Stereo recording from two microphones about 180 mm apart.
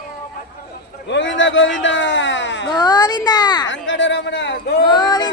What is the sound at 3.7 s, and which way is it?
Speech, 90° left.